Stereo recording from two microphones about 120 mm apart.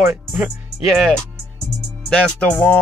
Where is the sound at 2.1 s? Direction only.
10° left (ahead or behind).